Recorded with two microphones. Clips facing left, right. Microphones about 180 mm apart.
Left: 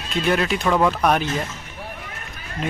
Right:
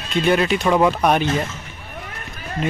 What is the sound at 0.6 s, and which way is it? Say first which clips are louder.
Speech: right 2 dB; 10° right (ahead or behind).